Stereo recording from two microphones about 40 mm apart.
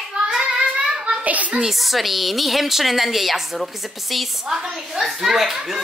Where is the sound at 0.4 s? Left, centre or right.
Right.